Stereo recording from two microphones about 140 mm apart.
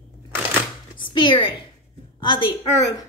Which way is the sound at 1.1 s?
35° left (ahead or behind).